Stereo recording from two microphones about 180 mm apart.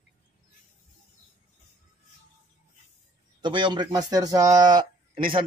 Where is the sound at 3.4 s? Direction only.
25° right (ahead or behind).